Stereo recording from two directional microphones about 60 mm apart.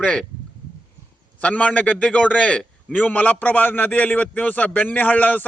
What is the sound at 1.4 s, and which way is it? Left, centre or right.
A man's voice, left.